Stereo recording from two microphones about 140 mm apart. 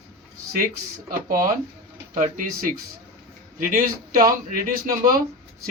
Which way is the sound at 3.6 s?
75° right (ahead or behind).